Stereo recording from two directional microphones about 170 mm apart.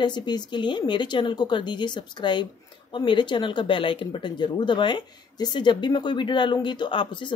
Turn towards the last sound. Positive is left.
turn(degrees=30)  # may be behind; listen again after turning